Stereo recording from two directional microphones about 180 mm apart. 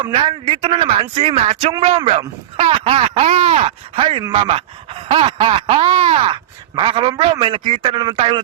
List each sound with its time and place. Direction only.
0.0 s speech: 30° right (ahead or behind)